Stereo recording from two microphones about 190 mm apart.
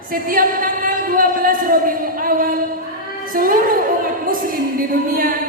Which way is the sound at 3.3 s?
45° right (ahead or behind).